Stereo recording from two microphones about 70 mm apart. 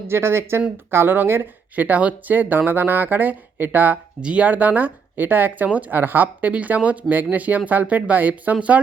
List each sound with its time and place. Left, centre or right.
0.1 s speech: right